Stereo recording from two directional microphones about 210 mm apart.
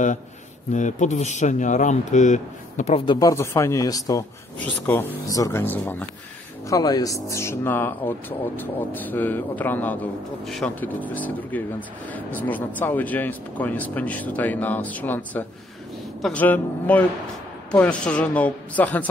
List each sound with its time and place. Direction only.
0.7 s speech: 35° left (ahead or behind)
3.2 s speech: 15° left (ahead or behind)